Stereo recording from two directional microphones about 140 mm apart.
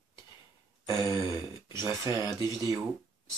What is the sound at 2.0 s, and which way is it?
Speech, 30° left (ahead or behind).